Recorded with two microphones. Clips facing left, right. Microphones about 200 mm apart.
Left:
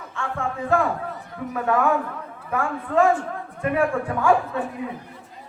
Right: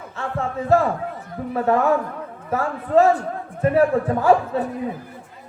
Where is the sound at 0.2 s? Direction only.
35° right (ahead or behind).